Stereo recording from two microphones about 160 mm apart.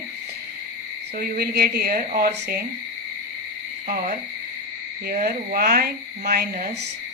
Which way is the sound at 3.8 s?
60° right (ahead or behind).